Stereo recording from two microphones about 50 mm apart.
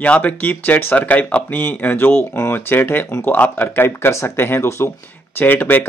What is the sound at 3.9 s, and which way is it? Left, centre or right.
Speech, left.